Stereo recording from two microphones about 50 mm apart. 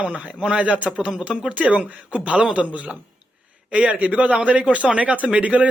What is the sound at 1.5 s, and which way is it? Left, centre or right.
Speech, right.